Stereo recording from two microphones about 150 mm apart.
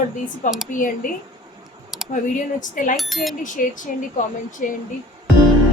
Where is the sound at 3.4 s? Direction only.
60° left (ahead or behind).